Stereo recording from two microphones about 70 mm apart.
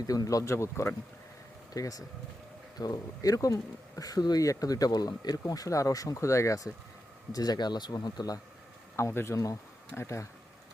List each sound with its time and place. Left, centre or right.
0.1 s speech: left
0.5 s speech: left
1.7 s speech: left
2.7 s speech: left
7.3 s speech: left
9.0 s speech: left